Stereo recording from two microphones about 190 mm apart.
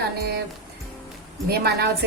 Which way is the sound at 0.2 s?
55° right (ahead or behind).